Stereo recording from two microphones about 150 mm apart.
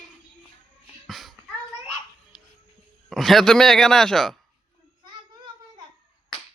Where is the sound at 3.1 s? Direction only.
Centre (ahead or behind).